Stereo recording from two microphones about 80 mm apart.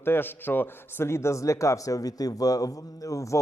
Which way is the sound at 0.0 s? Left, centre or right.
Left.